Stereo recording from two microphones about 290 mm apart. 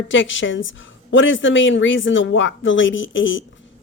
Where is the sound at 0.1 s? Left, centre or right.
Left.